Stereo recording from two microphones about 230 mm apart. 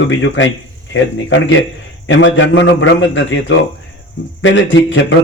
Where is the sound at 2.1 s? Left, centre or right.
Left.